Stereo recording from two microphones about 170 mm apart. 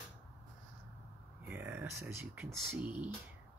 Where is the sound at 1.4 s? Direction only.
10° right (ahead or behind).